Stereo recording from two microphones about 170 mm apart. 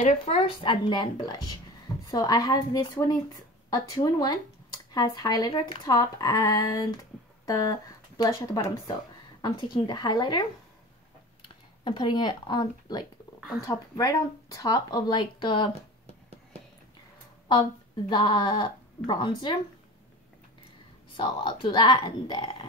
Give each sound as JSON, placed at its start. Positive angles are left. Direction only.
{"t": 0.2, "sound": "speech", "side_deg": 35}
{"t": 11.8, "sound": "speech", "side_deg": 25}
{"t": 17.5, "sound": "speech", "side_deg": 25}
{"t": 21.2, "sound": "speech", "side_deg": 25}